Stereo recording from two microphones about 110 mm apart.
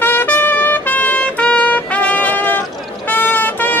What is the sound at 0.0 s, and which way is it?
Trumpet, 20° left (ahead or behind).